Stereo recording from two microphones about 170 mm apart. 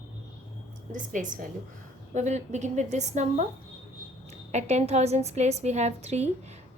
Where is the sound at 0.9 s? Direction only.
50° right (ahead or behind).